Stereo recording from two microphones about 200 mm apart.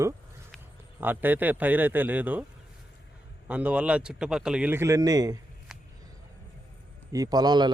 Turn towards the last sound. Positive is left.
turn(degrees=-20)  # may be behind; listen again after turning